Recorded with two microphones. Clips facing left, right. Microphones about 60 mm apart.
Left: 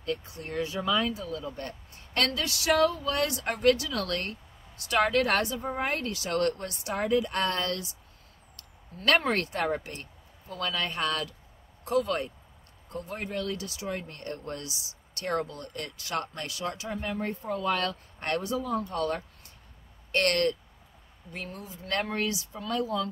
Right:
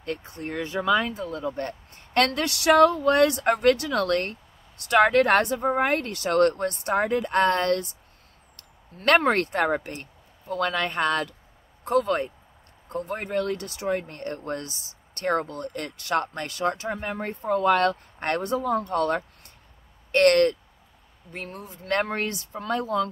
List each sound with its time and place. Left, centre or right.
0.2 s speech: right
8.9 s speech: right